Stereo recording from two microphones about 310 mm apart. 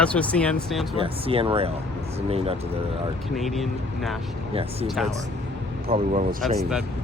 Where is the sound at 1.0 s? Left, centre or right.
Centre.